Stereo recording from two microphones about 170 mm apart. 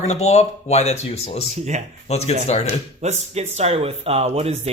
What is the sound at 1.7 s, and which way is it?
Speech, 45° right (ahead or behind).